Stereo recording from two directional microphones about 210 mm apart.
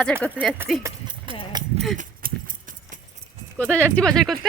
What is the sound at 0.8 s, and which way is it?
Clip-clop, 20° right (ahead or behind).